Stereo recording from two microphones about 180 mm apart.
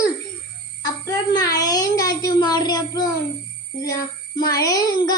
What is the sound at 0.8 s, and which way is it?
Child singing, 20° left (ahead or behind).